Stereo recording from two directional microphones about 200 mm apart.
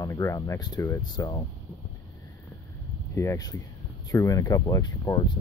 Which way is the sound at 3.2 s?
15° left (ahead or behind).